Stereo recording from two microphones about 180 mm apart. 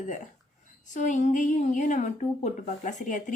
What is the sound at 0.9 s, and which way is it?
A woman's voice, 45° left (ahead or behind).